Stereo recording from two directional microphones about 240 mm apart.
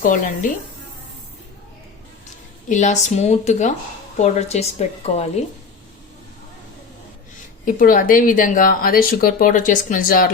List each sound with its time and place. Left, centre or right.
0.0 s speech: left
2.6 s speech: left
7.6 s speech: left